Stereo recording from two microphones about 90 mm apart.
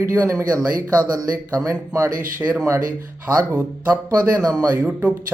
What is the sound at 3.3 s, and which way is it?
Speech, 30° right (ahead or behind).